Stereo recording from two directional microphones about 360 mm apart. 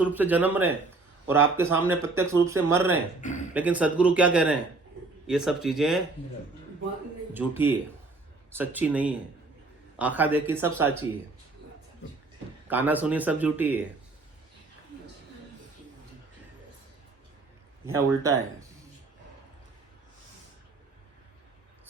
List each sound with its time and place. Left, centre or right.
0.0 s a man's voice: centre
3.2 s speech: left
3.5 s a man's voice: centre
7.3 s a man's voice: centre
12.6 s a man's voice: centre
17.8 s speech: centre